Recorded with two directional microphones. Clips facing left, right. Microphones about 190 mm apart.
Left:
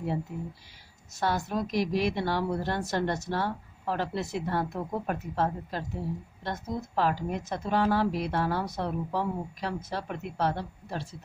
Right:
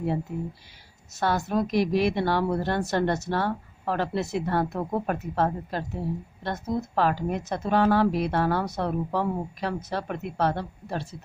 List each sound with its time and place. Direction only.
1.2 s a woman's voice: 60° right (ahead or behind)